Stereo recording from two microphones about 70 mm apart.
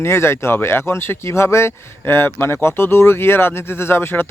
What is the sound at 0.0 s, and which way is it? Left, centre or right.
Speech, left.